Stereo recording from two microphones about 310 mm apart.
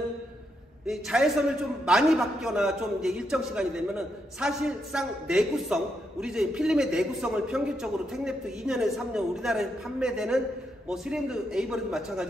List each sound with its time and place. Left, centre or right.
0.8 s a man's voice: centre